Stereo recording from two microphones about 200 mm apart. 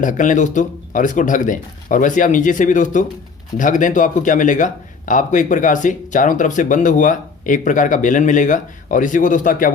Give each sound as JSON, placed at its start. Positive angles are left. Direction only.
{"t": 0.0, "sound": "speech", "side_deg": 40}